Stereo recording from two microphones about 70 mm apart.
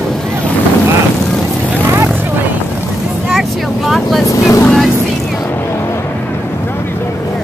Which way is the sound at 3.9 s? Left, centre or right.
Centre.